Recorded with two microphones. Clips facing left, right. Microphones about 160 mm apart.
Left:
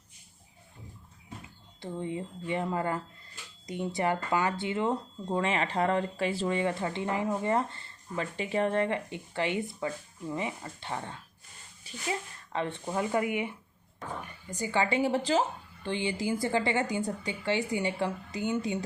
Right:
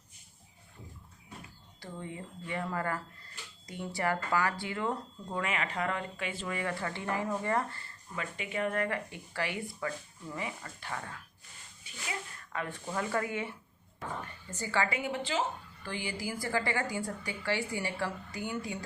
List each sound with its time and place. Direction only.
1.8 s speech: 20° left (ahead or behind)
11.9 s a sound: 35° left (ahead or behind)
12.5 s speech: 25° left (ahead or behind)
15.8 s speech: 25° left (ahead or behind)